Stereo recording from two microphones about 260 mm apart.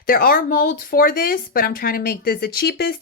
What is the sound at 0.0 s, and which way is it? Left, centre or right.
A woman's voice, left.